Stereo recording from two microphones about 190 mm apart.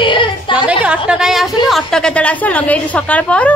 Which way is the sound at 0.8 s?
5° right (ahead or behind).